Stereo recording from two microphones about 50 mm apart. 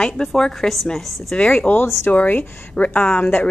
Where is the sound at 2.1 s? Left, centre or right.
Left.